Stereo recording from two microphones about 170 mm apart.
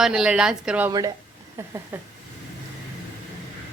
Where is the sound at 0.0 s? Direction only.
5° right (ahead or behind).